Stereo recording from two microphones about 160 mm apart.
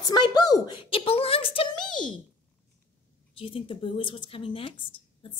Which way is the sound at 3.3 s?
35° left (ahead or behind).